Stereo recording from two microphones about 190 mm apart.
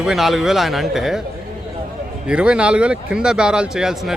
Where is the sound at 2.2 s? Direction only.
5° right (ahead or behind).